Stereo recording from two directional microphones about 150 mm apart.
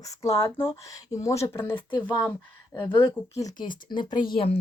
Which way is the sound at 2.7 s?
25° left (ahead or behind).